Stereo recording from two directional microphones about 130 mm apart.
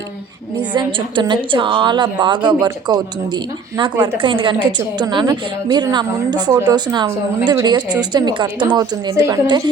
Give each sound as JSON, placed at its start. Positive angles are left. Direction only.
{"t": 0.7, "sound": "a woman's voice", "side_deg": -40}